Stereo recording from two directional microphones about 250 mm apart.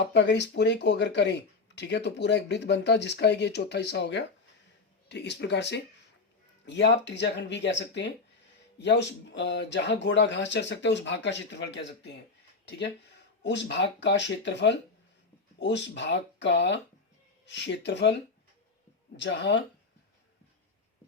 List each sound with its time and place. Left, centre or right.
0.0 s speech: left
19.1 s speech: left